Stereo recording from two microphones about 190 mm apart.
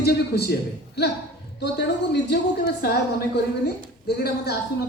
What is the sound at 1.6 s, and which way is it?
A woman's voice, 60° left (ahead or behind).